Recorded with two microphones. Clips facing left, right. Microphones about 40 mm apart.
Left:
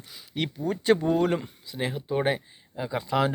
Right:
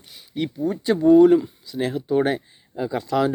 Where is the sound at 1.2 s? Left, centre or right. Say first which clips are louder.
Right 12 dB; left.